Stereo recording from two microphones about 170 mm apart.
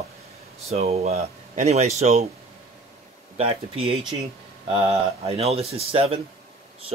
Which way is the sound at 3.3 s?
35° right (ahead or behind).